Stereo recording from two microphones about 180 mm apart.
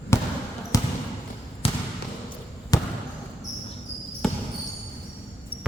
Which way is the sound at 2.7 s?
20° left (ahead or behind).